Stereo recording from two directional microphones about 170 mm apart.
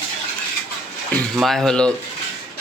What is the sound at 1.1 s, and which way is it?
Speech, 5° left (ahead or behind).